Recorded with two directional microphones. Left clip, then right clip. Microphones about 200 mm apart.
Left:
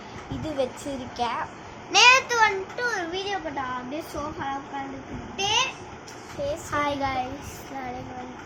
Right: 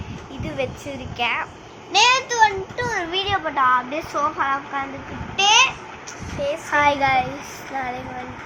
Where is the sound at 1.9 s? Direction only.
35° left (ahead or behind).